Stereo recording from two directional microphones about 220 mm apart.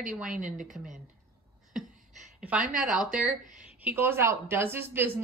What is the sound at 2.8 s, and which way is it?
Speech, 5° right (ahead or behind).